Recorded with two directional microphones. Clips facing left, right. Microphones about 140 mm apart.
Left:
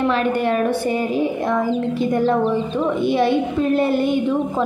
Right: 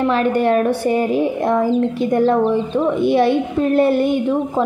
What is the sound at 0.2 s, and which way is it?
Speech, 45° right (ahead or behind).